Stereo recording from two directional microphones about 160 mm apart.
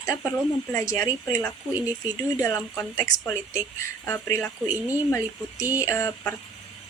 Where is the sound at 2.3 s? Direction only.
20° left (ahead or behind).